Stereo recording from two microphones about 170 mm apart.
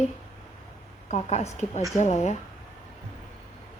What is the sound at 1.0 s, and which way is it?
Speech, 40° left (ahead or behind).